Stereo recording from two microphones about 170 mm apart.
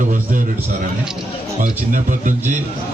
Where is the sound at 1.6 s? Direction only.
50° right (ahead or behind).